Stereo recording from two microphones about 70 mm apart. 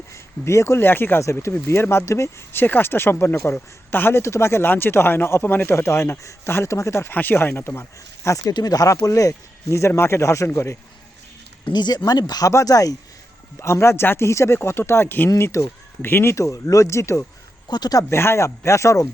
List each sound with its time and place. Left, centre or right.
0.1 s speech: left
1.2 s speech: left
7.1 s speech: left
8.5 s speech: left
11.7 s speech: left
12.3 s speech: left
13.6 s speech: left
17.7 s speech: left
18.1 s speech: left